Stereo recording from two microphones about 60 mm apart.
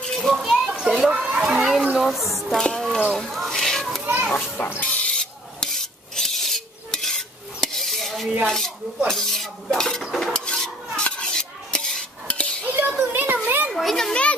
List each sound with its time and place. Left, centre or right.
0.0 s children playing: centre
0.4 s children playing: centre
1.1 s a woman's voice: centre
2.6 s speech: centre
3.1 s a sound: centre
4.6 s a sound: left
5.1 s filing: centre
8.5 s dishes: centre
10.1 s stir: centre
11.0 s dishes: centre
12.6 s a sound: right
13.3 s children playing: right
13.7 s children playing: centre